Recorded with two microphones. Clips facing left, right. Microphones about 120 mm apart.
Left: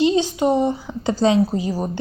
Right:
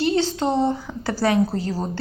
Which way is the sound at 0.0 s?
15° left (ahead or behind).